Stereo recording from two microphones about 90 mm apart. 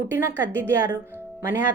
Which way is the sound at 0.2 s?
25° right (ahead or behind).